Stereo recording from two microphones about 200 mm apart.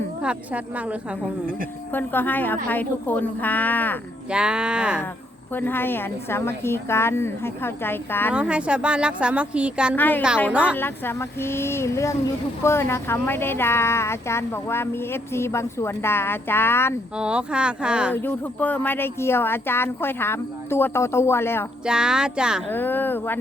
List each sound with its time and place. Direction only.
0.2 s speech: 5° right (ahead or behind)
1.9 s speech: 10° left (ahead or behind)
4.3 s speech: 5° right (ahead or behind)
5.5 s speech: 10° left (ahead or behind)
8.3 s speech: 5° right (ahead or behind)
9.9 s speech: 10° left (ahead or behind)
10.5 s speech: 5° right (ahead or behind)
10.8 s speech: 10° left (ahead or behind)
17.2 s speech: 5° right (ahead or behind)
18.1 s speech: 10° left (ahead or behind)
21.8 s speech: 5° right (ahead or behind)
22.7 s speech: 10° left (ahead or behind)